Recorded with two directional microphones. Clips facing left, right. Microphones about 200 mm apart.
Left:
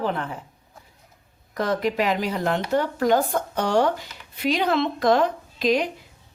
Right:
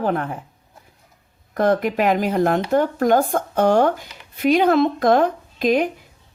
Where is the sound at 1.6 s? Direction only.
50° right (ahead or behind).